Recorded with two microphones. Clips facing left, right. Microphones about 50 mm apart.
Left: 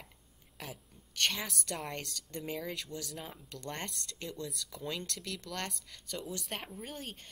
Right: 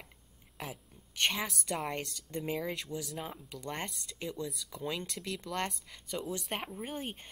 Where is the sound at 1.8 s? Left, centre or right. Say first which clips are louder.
Right 4 dB; centre.